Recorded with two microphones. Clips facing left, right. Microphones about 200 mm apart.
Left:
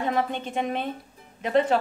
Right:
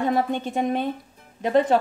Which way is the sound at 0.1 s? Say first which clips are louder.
Right 3 dB; 40° right (ahead or behind).